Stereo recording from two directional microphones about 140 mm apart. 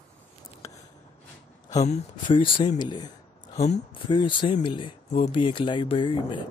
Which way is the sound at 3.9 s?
35° left (ahead or behind).